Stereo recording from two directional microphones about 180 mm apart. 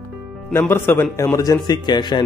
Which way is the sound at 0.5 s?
15° left (ahead or behind).